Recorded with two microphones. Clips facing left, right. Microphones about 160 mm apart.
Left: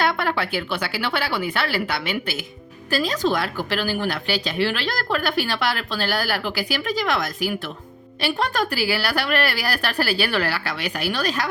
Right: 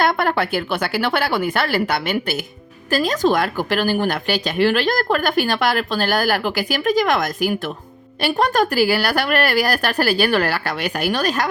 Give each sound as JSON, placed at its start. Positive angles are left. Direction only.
{"t": 0.0, "sound": "a woman's voice", "side_deg": -45}